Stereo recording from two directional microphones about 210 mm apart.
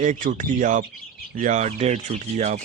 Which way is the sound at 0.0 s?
40° right (ahead or behind).